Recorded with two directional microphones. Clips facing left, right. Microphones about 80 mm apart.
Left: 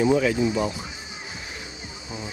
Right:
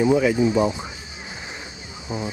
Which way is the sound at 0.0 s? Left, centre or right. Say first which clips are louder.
Right 2 dB; centre.